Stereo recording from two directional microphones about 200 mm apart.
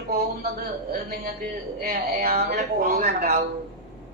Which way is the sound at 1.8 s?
50° right (ahead or behind).